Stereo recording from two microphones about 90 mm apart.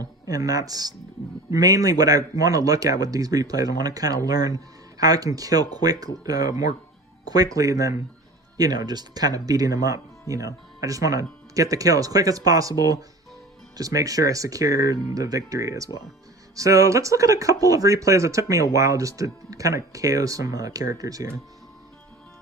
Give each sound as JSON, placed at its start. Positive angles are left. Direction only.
{"t": 0.0, "sound": "a man's voice", "side_deg": -40}